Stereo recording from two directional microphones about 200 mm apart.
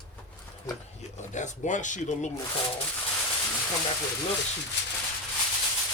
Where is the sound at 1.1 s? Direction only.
35° left (ahead or behind).